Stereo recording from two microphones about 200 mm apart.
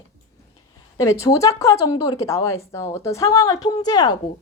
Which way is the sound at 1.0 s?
15° left (ahead or behind).